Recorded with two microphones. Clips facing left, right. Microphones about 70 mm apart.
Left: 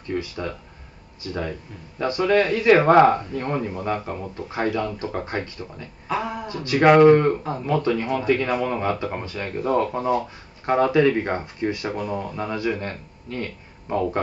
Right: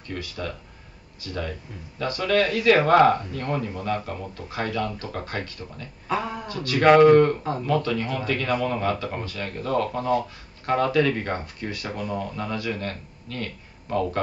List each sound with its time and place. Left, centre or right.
0.1 s speech: left
6.0 s a sound: centre
6.4 s speech: left
12.0 s speech: centre